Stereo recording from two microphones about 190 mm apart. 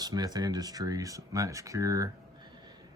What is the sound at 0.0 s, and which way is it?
Speech, 20° right (ahead or behind).